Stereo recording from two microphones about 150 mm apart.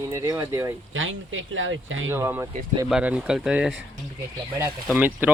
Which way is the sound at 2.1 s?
15° right (ahead or behind).